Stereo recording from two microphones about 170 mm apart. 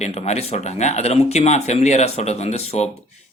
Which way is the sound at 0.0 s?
40° left (ahead or behind).